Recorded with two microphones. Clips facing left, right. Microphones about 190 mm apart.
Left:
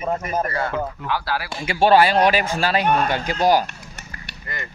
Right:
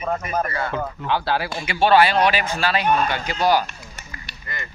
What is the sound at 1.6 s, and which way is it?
Speech, 40° left (ahead or behind).